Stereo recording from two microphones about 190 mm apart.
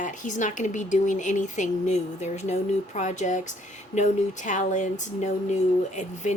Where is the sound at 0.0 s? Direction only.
40° left (ahead or behind).